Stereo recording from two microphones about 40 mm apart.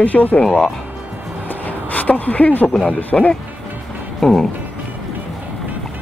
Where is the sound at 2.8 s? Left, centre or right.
Left.